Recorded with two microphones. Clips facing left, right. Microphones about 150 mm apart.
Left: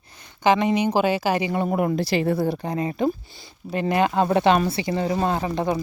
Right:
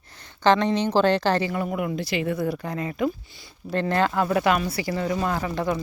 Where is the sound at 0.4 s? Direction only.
10° left (ahead or behind).